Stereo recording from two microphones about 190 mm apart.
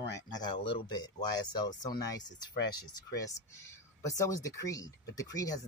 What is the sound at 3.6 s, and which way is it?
Speech, 15° left (ahead or behind).